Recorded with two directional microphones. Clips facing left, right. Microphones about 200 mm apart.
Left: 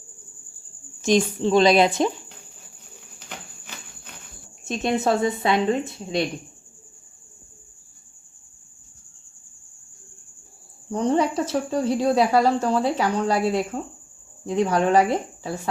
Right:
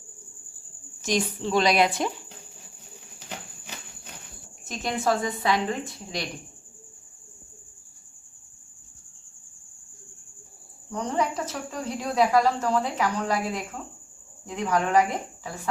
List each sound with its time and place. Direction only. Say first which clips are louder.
1.0 s a woman's voice: left 7 dB; 25° left (ahead or behind)
4.6 s a woman's voice: left 4 dB; 25° left (ahead or behind)
10.9 s speech: left 6 dB; 30° left (ahead or behind)